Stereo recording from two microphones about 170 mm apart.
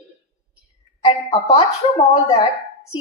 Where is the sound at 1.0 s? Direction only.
35° left (ahead or behind).